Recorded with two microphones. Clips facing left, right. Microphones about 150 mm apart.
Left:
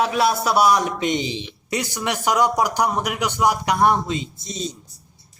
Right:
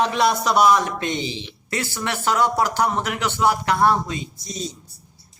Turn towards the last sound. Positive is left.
turn(degrees=20)  # may be behind; listen again after turning